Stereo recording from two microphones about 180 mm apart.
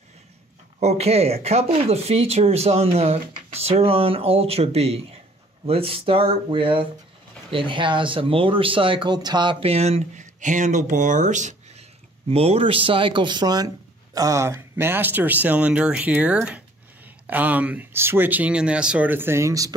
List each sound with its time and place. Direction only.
0.7 s speech: 35° right (ahead or behind); by 19.7 s 15° right (ahead or behind)